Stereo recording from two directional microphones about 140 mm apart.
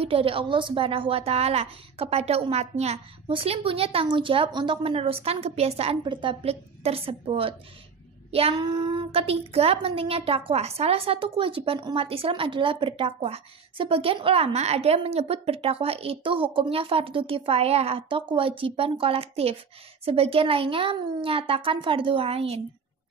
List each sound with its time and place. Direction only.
0.0 s a woman's voice: 40° right (ahead or behind)
8.3 s child singing: 45° right (ahead or behind)
8.5 s speech: 35° right (ahead or behind)